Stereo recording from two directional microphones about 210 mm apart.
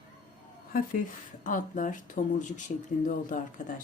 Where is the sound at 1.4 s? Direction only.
40° left (ahead or behind).